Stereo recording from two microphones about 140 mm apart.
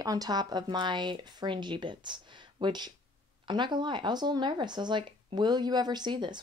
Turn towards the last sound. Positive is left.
turn(degrees=-30)  # may be behind; listen again after turning